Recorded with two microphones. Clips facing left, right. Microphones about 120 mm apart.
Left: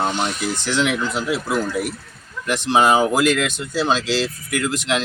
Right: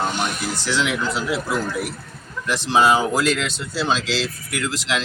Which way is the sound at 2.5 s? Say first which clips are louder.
Left 1 dB; 55° left (ahead or behind).